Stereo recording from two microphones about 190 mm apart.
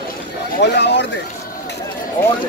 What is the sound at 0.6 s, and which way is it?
Speech, 65° left (ahead or behind).